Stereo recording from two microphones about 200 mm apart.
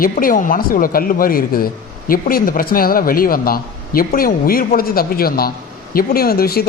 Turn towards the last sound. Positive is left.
turn(degrees=50)  # may be behind; listen again after turning